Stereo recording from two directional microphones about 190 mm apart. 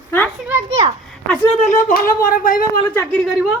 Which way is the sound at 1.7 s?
45° left (ahead or behind).